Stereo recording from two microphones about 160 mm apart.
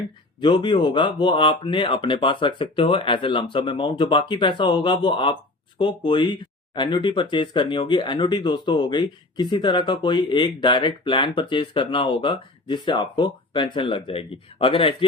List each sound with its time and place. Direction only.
0.4 s speech: 30° left (ahead or behind)